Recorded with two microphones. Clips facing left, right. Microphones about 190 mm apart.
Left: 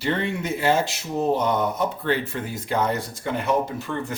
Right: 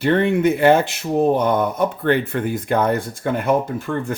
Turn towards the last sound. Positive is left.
turn(degrees=-50)  # may be behind; listen again after turning